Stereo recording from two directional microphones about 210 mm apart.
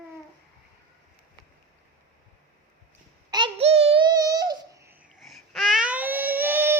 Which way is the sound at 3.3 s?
25° right (ahead or behind).